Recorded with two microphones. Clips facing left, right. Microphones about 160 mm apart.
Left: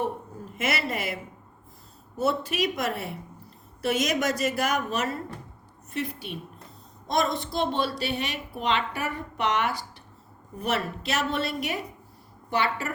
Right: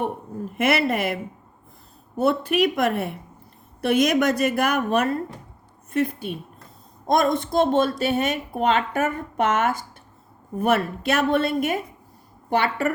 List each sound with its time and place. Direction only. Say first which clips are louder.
0.5 s a woman's voice: right 8 dB; 60° right (ahead or behind)